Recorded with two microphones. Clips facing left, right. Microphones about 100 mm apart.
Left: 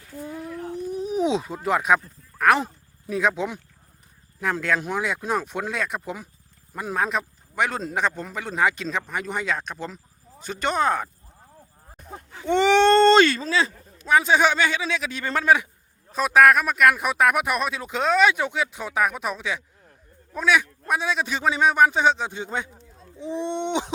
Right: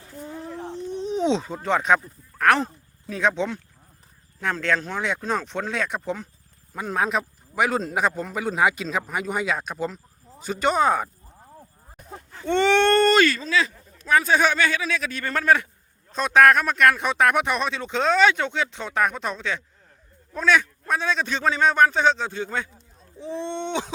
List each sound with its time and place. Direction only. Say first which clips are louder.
0.3 s a sound: left 1 dB; 25° right (ahead or behind)
0.9 s speech: right 1 dB; 5° left (ahead or behind)
4.6 s speech: right 1 dB; 10° left (ahead or behind)
12.3 s speech: left 1 dB; 10° left (ahead or behind); by 13.7 s 30° left (ahead or behind)
14.0 s speech: left 1 dB; 15° left (ahead or behind)